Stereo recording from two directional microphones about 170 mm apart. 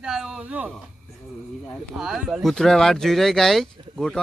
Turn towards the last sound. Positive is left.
turn(degrees=0)  # may be behind; listen again after turning